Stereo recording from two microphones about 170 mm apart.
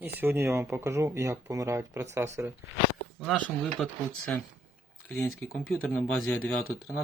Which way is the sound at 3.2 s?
Centre (ahead or behind).